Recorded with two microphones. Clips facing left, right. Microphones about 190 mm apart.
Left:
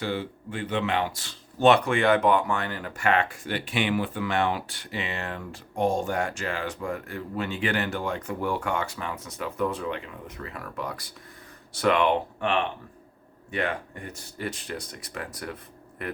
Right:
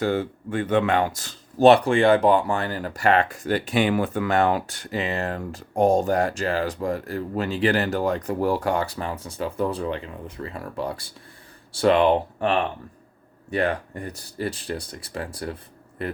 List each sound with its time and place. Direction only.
0.0 s speech: 45° right (ahead or behind); by 16.1 s 30° right (ahead or behind)